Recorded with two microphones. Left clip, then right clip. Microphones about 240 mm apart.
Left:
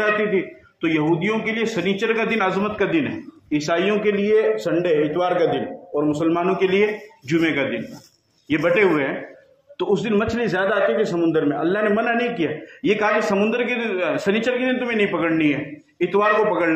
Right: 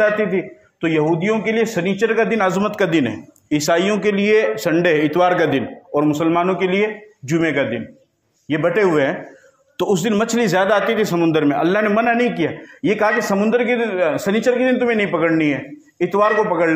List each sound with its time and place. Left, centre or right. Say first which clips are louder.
0.0 s a man's voice: right 3 dB; right